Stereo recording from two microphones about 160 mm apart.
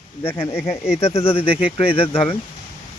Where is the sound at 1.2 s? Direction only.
35° left (ahead or behind).